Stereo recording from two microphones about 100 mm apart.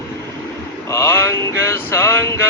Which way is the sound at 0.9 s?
25° left (ahead or behind).